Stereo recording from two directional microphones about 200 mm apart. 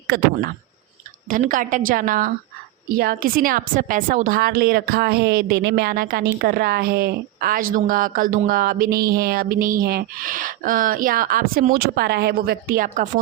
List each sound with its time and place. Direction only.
1.3 s a woman's voice: 40° right (ahead or behind)